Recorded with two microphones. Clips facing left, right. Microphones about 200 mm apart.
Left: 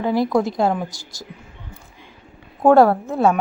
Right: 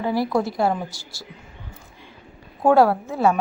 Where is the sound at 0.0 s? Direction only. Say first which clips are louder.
Left 3 dB; 15° left (ahead or behind).